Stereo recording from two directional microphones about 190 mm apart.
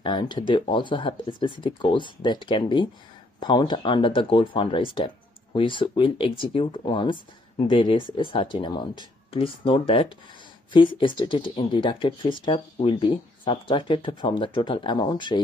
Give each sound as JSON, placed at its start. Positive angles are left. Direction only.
{"t": 0.0, "sound": "speech", "side_deg": 25}